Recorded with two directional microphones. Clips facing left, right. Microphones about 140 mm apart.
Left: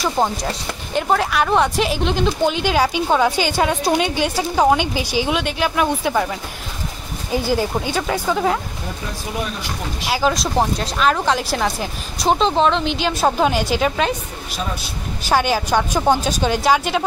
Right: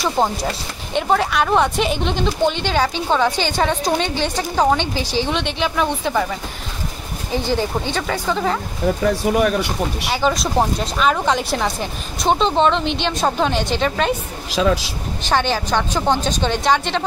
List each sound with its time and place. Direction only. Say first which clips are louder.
0.0 s speech: right 1 dB; centre (ahead or behind)
7.4 s speech: even; 10° left (ahead or behind)
9.0 s speech: right 10 dB; 65° right (ahead or behind)
10.0 s speech: left 2 dB; 5° left (ahead or behind)
14.5 s speech: right 10 dB; 90° right
15.2 s speech: left 1 dB; 10° left (ahead or behind)